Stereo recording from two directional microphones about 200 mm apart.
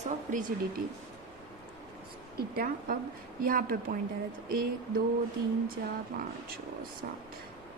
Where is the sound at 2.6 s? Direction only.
45° right (ahead or behind).